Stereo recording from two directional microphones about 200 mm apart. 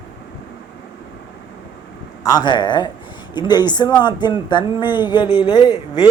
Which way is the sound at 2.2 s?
20° left (ahead or behind).